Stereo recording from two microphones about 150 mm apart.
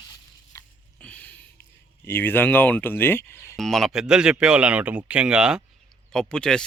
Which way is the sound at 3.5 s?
Centre (ahead or behind).